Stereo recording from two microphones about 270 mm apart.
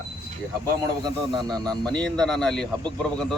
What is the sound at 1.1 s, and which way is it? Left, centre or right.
Speech, centre.